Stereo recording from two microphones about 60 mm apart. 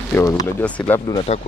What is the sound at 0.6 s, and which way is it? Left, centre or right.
Speech, left.